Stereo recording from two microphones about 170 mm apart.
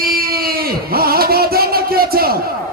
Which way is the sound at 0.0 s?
65° right (ahead or behind).